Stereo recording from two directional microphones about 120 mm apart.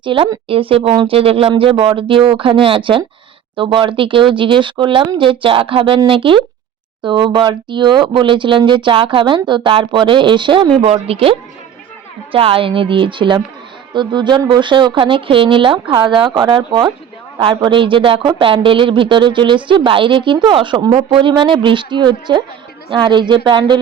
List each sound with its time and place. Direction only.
0.0 s speech: 45° right (ahead or behind)
10.8 s speech: 55° right (ahead or behind); by 23.7 s 40° right (ahead or behind)